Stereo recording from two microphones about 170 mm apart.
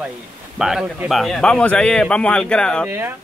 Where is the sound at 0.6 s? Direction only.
5° right (ahead or behind).